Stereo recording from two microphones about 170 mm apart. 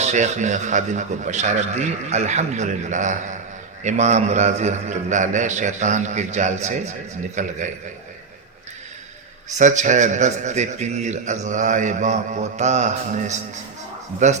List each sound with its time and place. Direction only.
0.0 s a man's voice: 45° right (ahead or behind)
9.5 s a man's voice: 45° right (ahead or behind)